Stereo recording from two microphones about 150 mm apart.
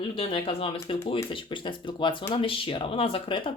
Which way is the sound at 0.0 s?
35° left (ahead or behind).